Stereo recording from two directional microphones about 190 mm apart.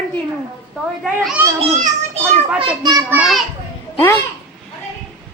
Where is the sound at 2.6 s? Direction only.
20° right (ahead or behind).